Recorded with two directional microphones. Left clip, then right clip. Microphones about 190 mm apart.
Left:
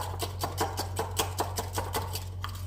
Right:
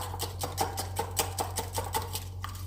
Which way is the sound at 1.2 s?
Centre (ahead or behind).